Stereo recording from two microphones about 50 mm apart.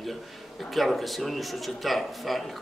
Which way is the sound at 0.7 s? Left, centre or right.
Centre.